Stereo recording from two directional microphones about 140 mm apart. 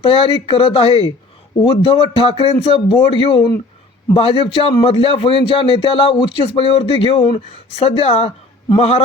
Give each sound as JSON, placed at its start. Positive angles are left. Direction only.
{"t": 0.0, "sound": "a man's voice", "side_deg": 40}